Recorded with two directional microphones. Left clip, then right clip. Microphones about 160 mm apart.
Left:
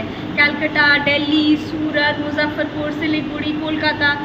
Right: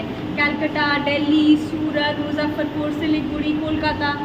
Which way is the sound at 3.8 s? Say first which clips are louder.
Left 8 dB; 15° right (ahead or behind).